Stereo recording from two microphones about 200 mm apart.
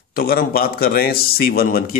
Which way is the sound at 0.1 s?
50° left (ahead or behind).